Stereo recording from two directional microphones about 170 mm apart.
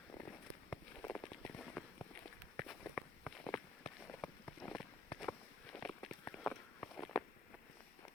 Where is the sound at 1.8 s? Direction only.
Centre (ahead or behind).